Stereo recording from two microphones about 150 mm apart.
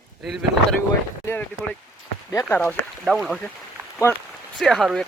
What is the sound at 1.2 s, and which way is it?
Speech, 10° left (ahead or behind).